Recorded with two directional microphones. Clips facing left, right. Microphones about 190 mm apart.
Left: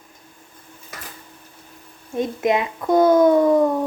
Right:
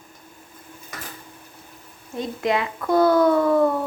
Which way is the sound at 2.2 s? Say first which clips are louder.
Left 3 dB; 20° left (ahead or behind).